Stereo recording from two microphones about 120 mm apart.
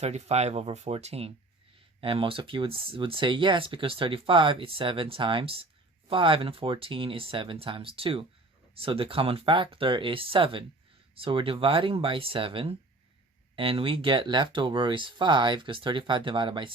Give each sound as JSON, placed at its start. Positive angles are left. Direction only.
{"t": 0.0, "sound": "speech", "side_deg": -65}